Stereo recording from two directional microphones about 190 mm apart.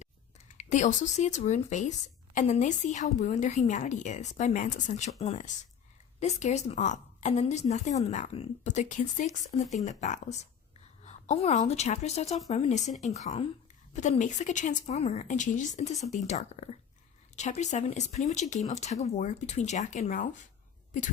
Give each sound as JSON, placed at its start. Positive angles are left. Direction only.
{"t": 0.0, "sound": "a woman's voice", "side_deg": 40}